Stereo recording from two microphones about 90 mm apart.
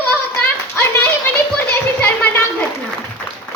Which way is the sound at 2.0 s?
20° left (ahead or behind).